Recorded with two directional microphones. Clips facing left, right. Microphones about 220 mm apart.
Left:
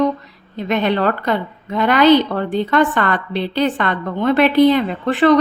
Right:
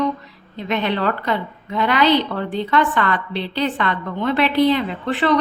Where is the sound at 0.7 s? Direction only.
45° left (ahead or behind).